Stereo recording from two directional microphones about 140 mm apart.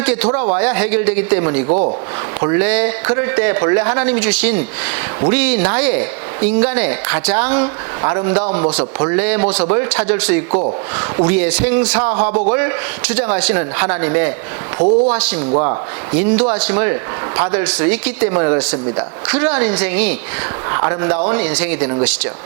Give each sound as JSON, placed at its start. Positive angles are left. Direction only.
{"t": 0.0, "sound": "a woman's voice", "side_deg": -10}
{"t": 1.6, "sound": "speech", "side_deg": -40}
{"t": 2.4, "sound": "a woman's voice", "side_deg": -15}
{"t": 14.8, "sound": "a man's voice", "side_deg": -40}
{"t": 15.1, "sound": "a woman's voice", "side_deg": -10}
{"t": 15.5, "sound": "speech", "side_deg": -30}
{"t": 16.1, "sound": "a woman's voice", "side_deg": -10}